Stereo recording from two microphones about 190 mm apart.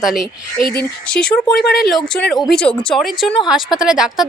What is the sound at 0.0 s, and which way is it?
A woman's voice, centre (ahead or behind).